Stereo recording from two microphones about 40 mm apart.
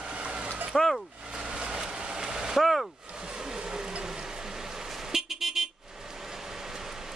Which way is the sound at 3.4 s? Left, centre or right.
Centre.